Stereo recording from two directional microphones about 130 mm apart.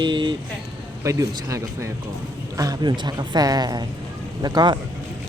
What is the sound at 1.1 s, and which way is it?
Speech, 25° right (ahead or behind).